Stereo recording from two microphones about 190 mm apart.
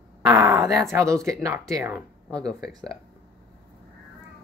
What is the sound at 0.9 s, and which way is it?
Speech, 15° right (ahead or behind).